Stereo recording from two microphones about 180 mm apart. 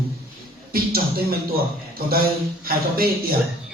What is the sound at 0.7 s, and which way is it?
A man's voice, 55° right (ahead or behind).